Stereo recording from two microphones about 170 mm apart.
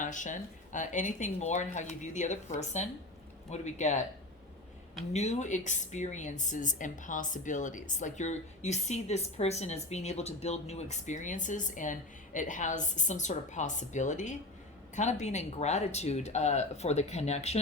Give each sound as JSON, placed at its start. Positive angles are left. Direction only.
{"t": 0.0, "sound": "speech", "side_deg": 50}
{"t": 5.1, "sound": "speech", "side_deg": 40}